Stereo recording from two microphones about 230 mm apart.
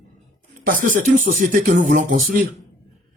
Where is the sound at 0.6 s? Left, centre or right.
Right.